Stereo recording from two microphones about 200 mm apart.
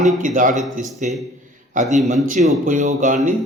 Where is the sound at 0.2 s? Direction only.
40° right (ahead or behind).